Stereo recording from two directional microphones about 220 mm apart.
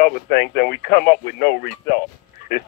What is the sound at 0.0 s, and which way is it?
A man's voice, 45° left (ahead or behind).